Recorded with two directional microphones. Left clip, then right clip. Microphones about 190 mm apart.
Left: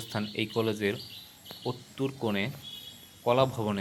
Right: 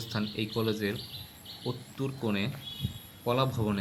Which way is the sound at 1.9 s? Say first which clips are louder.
Left 2 dB; 10° left (ahead or behind).